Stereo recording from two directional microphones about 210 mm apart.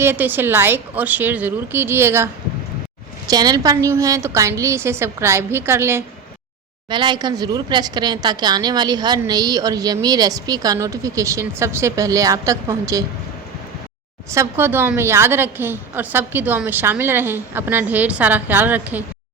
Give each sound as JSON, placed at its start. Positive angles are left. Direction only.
{"t": 0.0, "sound": "a woman's voice", "side_deg": -10}
{"t": 14.3, "sound": "a woman's voice", "side_deg": -10}